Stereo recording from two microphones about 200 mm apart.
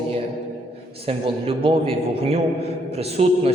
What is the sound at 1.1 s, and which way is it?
A man's voice, 30° right (ahead or behind).